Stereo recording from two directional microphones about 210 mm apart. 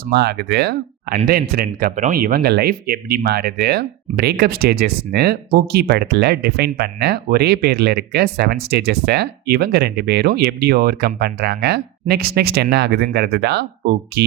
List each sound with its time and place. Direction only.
0.0 s speech: 50° right (ahead or behind)